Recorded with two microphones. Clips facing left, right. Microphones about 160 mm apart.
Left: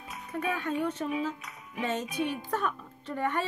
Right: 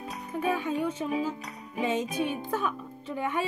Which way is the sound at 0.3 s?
10° right (ahead or behind).